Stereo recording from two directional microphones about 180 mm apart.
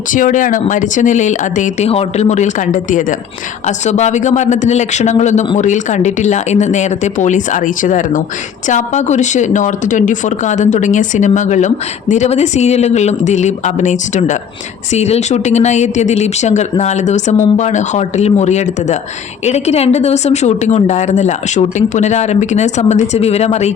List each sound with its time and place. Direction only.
0.1 s speech: 45° left (ahead or behind)